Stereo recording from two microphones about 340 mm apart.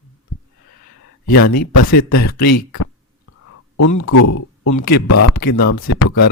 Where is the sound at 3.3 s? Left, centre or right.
Left.